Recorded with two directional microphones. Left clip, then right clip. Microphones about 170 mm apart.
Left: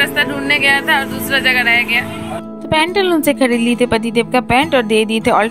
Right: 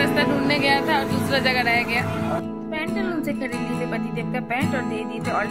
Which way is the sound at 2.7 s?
45° left (ahead or behind).